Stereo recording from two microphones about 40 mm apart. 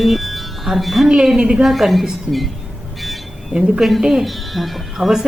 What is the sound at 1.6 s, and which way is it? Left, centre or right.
Speech, centre.